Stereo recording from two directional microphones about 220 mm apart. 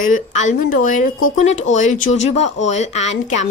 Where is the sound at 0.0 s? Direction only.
35° left (ahead or behind).